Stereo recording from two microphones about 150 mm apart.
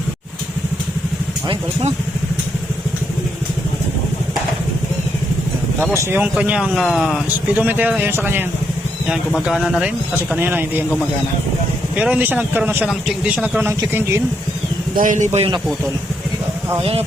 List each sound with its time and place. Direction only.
5.9 s speech: 15° right (ahead or behind)
9.0 s speech: 5° right (ahead or behind)
11.9 s speech: 5° right (ahead or behind)
14.9 s speech: 60° right (ahead or behind)